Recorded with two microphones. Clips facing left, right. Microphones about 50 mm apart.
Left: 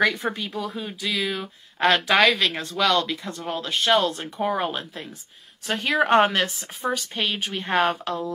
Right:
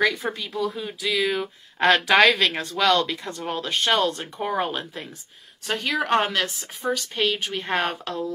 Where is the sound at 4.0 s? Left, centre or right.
Centre.